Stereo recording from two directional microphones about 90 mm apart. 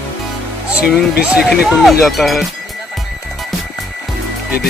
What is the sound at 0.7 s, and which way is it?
Speech, 15° right (ahead or behind).